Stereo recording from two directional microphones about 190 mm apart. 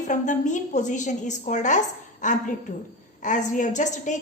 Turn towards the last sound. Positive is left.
turn(degrees=40)  # may be behind; listen again after turning